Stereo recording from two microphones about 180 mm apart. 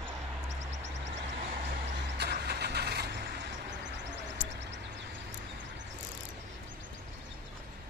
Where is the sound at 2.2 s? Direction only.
65° right (ahead or behind).